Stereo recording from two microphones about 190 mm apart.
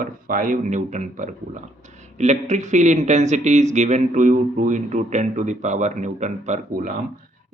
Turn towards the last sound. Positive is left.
turn(degrees=-45)  # may be behind; listen again after turning